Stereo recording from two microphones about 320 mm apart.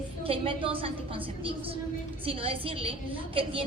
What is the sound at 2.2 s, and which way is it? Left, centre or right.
A woman's voice, centre.